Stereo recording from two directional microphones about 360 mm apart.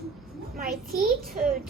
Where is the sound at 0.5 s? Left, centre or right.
Right.